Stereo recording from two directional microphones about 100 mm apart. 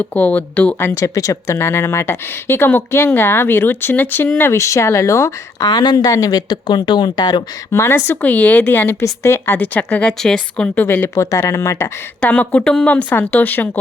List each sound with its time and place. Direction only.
0.0 s speech: 15° left (ahead or behind); by 7.4 s 45° left (ahead or behind)
7.7 s speech: 25° left (ahead or behind); by 10.8 s 10° left (ahead or behind)
10.8 s speech: 20° left (ahead or behind)
12.2 s speech: 15° left (ahead or behind)